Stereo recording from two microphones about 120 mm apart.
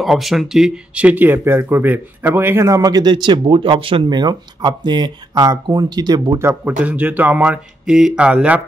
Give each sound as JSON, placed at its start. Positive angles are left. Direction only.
{"t": 0.0, "sound": "speech", "side_deg": 0}
{"t": 6.4, "sound": "speech", "side_deg": -15}